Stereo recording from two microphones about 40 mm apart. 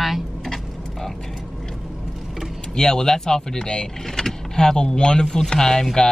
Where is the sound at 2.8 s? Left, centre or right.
Centre.